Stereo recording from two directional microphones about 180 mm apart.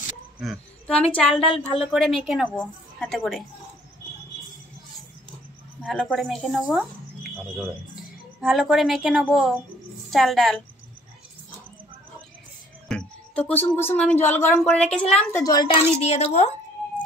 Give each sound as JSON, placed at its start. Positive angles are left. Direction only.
{"t": 0.4, "sound": "a woman's voice", "side_deg": 0}
{"t": 1.4, "sound": "speech", "side_deg": 30}
{"t": 1.7, "sound": "a woman's voice", "side_deg": 0}
{"t": 5.8, "sound": "a woman's voice", "side_deg": 0}
{"t": 12.8, "sound": "speech", "side_deg": 5}
{"t": 15.4, "sound": "a child's voice", "side_deg": 25}
{"t": 16.0, "sound": "speech", "side_deg": 35}